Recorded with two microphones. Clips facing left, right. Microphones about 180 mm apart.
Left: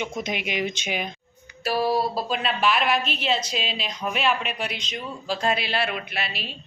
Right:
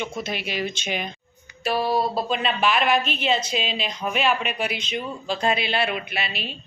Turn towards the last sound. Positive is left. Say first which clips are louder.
# right 2 dB
turn(degrees=0)  # may be behind; listen again after turning